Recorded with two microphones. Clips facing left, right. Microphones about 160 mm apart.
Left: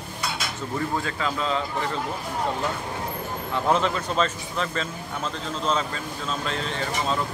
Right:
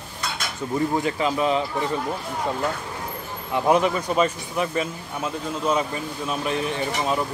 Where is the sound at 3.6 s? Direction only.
15° right (ahead or behind).